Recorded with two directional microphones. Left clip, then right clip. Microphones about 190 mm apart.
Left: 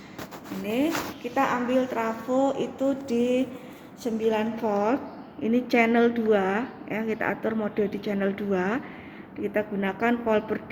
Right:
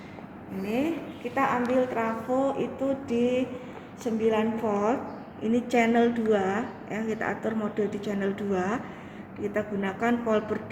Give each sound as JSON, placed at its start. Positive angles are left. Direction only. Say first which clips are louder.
{"t": 1.4, "sound": "a woman's voice", "louder": "left 1 dB", "side_deg": 55}